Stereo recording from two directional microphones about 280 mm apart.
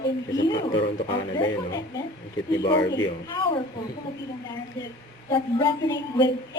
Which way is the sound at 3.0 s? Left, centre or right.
Centre.